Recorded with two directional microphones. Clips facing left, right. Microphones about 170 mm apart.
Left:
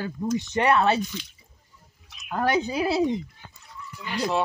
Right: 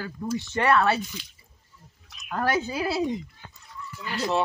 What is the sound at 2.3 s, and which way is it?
Speech, 20° left (ahead or behind).